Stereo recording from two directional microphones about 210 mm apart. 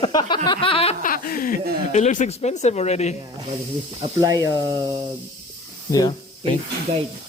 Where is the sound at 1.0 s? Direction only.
40° left (ahead or behind).